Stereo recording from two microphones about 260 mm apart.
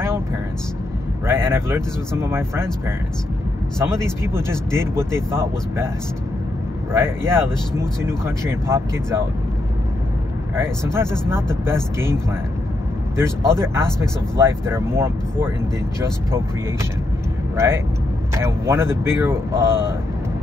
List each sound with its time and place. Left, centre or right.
1.2 s speech: centre
3.8 s speech: centre
6.9 s speech: centre
10.5 s speech: centre
18.3 s speech: centre